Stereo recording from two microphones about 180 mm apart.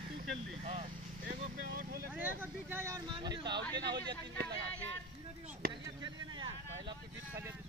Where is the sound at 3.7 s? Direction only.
25° right (ahead or behind).